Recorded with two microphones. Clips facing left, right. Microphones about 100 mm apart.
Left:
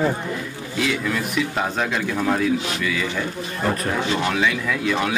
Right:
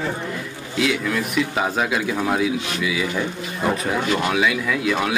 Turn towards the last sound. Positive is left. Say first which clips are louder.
# right 1 dB
turn(degrees=-5)  # may be behind; listen again after turning